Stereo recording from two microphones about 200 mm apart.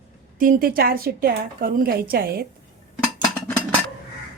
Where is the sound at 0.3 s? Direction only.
45° right (ahead or behind).